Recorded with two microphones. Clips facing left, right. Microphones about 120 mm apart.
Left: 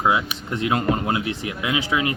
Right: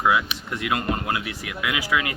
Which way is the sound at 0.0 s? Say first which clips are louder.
Left 1 dB; 25° left (ahead or behind).